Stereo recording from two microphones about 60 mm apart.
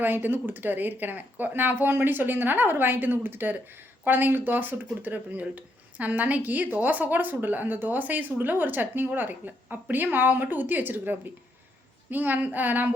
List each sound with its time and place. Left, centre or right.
0.0 s speech: right